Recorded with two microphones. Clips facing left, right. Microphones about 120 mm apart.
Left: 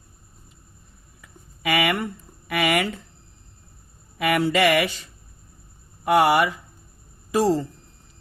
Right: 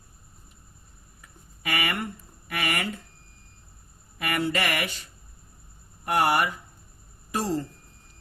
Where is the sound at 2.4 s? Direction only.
90° left.